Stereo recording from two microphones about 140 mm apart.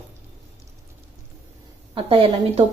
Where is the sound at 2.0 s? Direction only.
40° right (ahead or behind).